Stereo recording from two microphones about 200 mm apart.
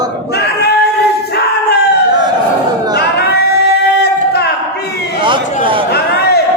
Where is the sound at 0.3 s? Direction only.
55° left (ahead or behind).